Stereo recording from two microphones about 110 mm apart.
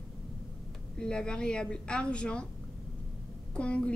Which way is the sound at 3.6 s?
10° left (ahead or behind).